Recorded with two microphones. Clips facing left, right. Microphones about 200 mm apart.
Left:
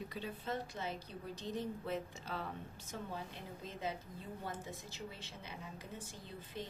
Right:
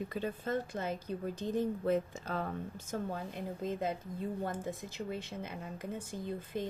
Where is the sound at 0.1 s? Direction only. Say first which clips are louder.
Right 7 dB; 50° right (ahead or behind).